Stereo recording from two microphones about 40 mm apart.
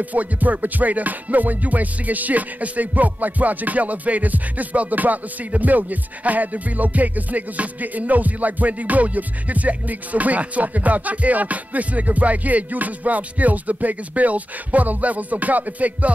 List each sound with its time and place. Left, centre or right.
0.0 s music: right